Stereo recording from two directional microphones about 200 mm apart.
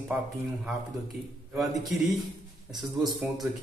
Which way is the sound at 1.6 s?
Centre (ahead or behind).